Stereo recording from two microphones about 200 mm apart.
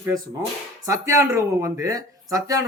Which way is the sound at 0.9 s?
15° right (ahead or behind).